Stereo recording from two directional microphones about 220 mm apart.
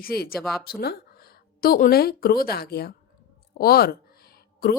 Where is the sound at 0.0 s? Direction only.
45° left (ahead or behind).